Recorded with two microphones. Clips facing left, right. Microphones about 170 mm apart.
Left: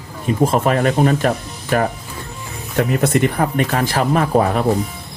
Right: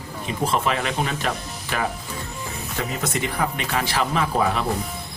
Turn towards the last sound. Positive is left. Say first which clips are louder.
# left 6 dB
turn(degrees=50)  # may be behind; listen again after turning